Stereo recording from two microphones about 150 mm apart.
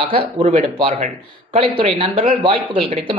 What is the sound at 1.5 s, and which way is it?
Speech, 40° right (ahead or behind).